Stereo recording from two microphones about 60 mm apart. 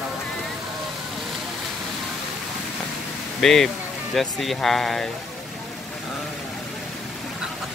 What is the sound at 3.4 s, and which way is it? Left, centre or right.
Speech, centre.